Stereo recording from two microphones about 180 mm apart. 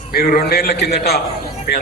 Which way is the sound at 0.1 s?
55° left (ahead or behind).